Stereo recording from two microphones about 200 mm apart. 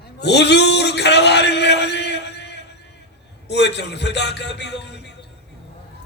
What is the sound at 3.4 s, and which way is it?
A man's voice, 60° left (ahead or behind).